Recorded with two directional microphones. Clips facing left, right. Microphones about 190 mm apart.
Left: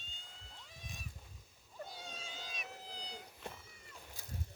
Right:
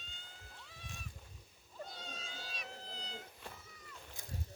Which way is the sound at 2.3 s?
15° left (ahead or behind).